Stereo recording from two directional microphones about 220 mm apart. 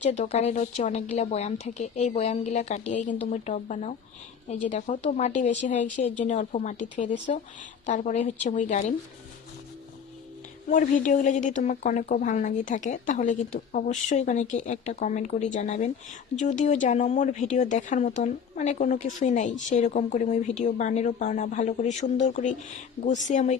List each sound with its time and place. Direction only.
0.0 s speech: 30° left (ahead or behind)
10.7 s speech: 35° left (ahead or behind)